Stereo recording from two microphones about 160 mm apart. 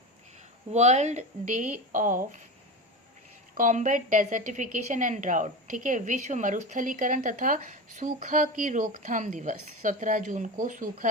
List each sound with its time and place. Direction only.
0.7 s a woman's voice: 45° right (ahead or behind)
3.6 s a woman's voice: 50° right (ahead or behind)